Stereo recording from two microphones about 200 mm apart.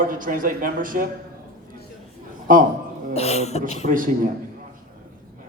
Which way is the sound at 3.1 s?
30° left (ahead or behind).